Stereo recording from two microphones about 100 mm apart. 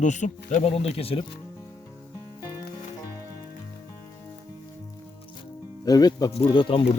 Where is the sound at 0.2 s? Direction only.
90° left.